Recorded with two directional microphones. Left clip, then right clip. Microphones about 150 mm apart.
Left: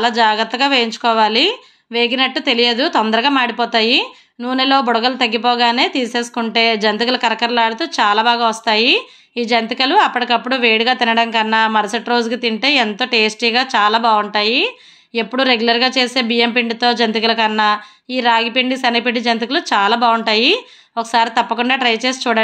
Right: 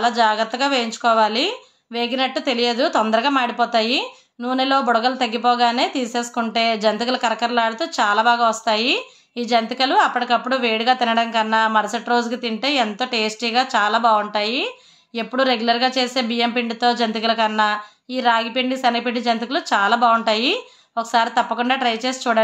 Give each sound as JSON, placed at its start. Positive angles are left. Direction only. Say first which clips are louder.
{"t": 0.0, "sound": "a woman's voice", "louder": "left 3 dB", "side_deg": 15}